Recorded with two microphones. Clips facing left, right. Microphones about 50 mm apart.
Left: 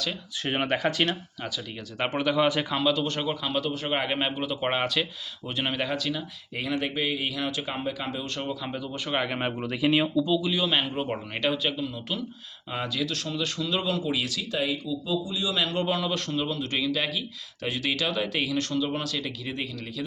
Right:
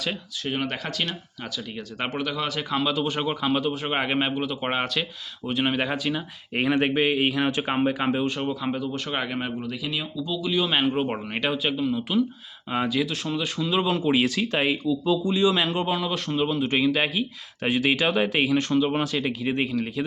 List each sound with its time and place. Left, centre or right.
0.4 s speech: left
2.6 s a man's voice: centre
5.7 s speech: centre
6.5 s speech: right
8.2 s a man's voice: centre
9.0 s speech: centre
9.6 s speech: left
10.2 s speech: centre
10.7 s a man's voice: centre
13.9 s speech: right
14.4 s speech: right
15.2 s speech: right
15.7 s a man's voice: centre
16.3 s speech: right